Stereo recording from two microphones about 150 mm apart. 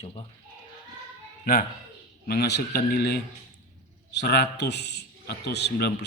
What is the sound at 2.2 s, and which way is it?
Speech, 90° left.